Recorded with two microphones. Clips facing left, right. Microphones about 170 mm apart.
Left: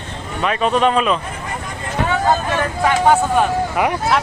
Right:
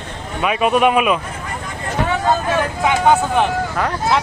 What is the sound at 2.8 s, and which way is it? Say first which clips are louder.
Speech: left 1 dB; 10° right (ahead or behind).